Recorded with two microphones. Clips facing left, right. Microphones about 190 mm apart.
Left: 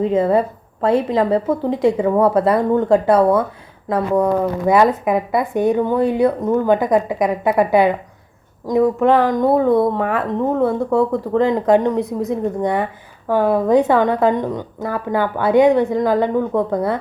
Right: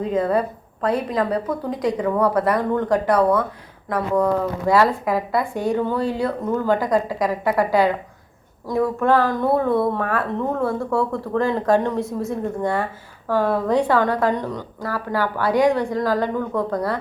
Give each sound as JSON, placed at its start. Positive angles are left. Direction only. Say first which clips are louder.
{"t": 0.0, "sound": "speech", "louder": "left 5 dB", "side_deg": 25}